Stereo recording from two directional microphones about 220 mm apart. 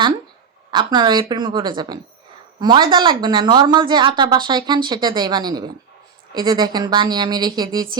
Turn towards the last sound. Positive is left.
turn(degrees=-20)  # may be behind; listen again after turning